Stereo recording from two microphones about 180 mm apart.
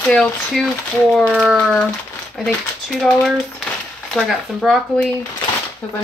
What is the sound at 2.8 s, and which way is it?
Speech, centre (ahead or behind).